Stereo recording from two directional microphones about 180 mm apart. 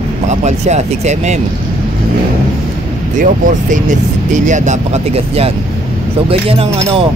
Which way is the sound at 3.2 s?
45° right (ahead or behind).